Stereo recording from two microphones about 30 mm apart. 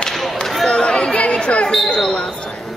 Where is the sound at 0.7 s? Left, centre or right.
Left.